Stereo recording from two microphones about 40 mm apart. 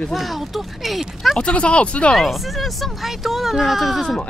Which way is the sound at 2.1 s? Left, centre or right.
Centre.